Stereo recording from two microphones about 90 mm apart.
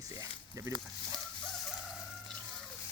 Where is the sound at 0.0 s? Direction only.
40° right (ahead or behind).